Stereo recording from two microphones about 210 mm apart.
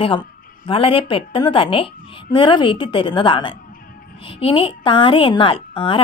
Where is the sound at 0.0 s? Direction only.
25° left (ahead or behind).